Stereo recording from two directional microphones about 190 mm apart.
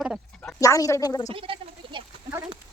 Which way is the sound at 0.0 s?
5° right (ahead or behind).